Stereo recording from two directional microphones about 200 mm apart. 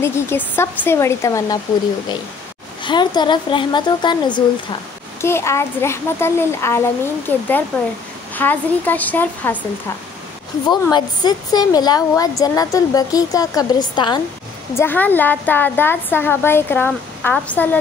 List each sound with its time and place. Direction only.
0.0 s a woman's voice: 10° left (ahead or behind)
2.8 s a woman's voice: 20° left (ahead or behind)
10.7 s a woman's voice: 20° left (ahead or behind)
14.7 s a woman's voice: 10° left (ahead or behind)